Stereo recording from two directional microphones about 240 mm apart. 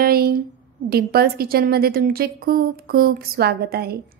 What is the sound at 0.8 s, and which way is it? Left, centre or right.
A woman's voice, right.